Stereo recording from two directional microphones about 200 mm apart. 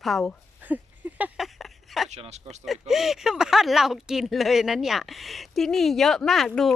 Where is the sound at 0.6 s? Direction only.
10° right (ahead or behind).